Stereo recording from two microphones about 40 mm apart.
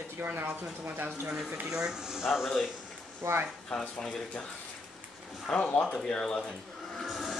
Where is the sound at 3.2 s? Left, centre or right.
Right.